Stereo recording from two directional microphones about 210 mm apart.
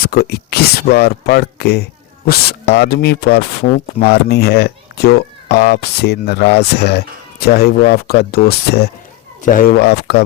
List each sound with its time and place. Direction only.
0.0 s speech: 45° left (ahead or behind)